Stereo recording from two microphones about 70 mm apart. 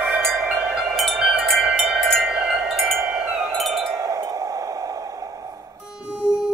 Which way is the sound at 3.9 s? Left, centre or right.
Right.